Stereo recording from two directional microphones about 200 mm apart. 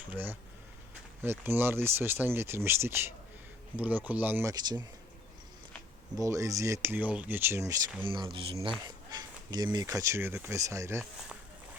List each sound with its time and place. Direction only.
0.0 s speech: 10° right (ahead or behind)
6.1 s speech: 15° right (ahead or behind)
8.0 s speech: 25° right (ahead or behind)